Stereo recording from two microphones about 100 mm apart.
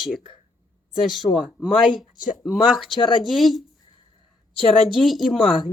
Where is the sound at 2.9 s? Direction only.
50° left (ahead or behind).